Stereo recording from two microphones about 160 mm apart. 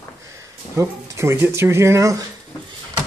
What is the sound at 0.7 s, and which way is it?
Speech, 15° right (ahead or behind).